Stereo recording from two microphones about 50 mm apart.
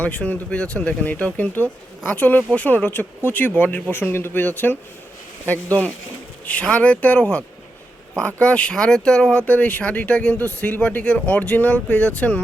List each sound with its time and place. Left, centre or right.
0.0 s speech: left
1.0 s speech: left
3.9 s a man's voice: left
4.4 s speech: left
7.2 s speech: left
9.5 s speech: left